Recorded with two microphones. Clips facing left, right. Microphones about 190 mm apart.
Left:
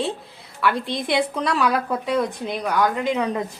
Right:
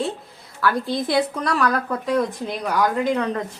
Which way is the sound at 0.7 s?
25° left (ahead or behind).